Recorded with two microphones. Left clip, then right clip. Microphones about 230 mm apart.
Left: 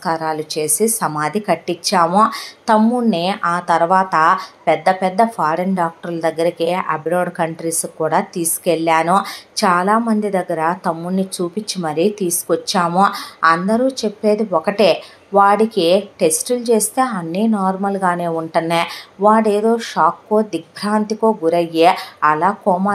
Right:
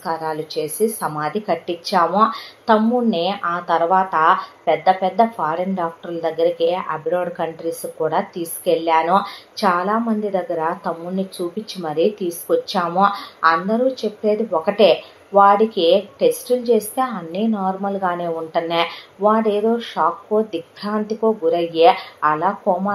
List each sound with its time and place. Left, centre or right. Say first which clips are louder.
0.0 s a woman's voice: left 4 dB; left